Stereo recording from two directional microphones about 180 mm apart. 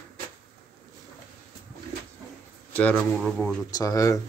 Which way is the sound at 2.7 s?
10° left (ahead or behind).